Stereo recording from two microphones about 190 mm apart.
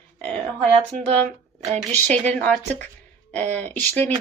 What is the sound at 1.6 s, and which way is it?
Speech, 35° right (ahead or behind).